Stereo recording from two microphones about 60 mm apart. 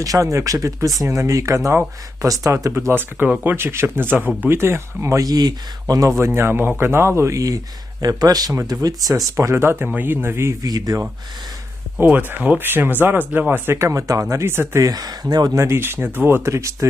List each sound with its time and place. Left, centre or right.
0.0 s speech: right
2.7 s speech: right
5.1 s speech: right
5.9 s speech: right
6.1 s speech: right
7.3 s speech: right
8.0 s speech: right
9.3 s speech: right
9.8 s speech: right
10.6 s speech: right
12.0 s speech: right
14.4 s speech: right
14.8 s speech: right
15.5 s speech: right